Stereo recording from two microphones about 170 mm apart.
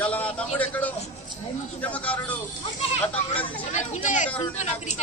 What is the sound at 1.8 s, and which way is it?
Speech, 10° left (ahead or behind).